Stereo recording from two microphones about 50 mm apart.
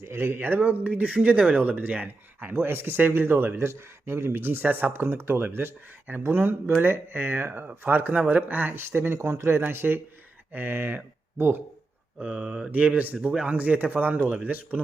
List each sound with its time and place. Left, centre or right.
0.0 s speech: right
0.3 s speech: right
3.6 s speech: right
7.9 s speech: right
9.6 s speech: right
12.2 s speech: right
12.7 s speech: right